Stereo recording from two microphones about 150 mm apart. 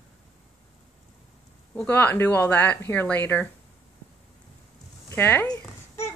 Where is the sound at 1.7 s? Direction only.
10° left (ahead or behind).